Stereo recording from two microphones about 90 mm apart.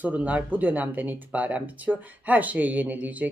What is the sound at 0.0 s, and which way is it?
Speech, 15° right (ahead or behind).